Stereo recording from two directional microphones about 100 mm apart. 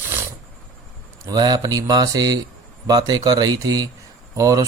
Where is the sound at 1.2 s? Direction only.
40° right (ahead or behind).